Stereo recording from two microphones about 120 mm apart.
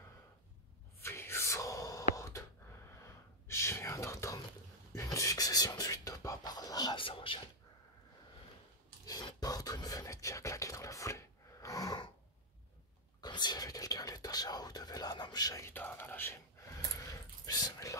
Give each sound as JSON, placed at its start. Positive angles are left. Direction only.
{"t": 1.0, "sound": "gasp", "side_deg": 20}
{"t": 3.0, "sound": "whispering", "side_deg": 25}
{"t": 9.0, "sound": "a sound", "side_deg": 30}
{"t": 13.2, "sound": "whispering", "side_deg": 35}
{"t": 15.7, "sound": "whispering", "side_deg": 15}
{"t": 17.5, "sound": "whispering", "side_deg": 30}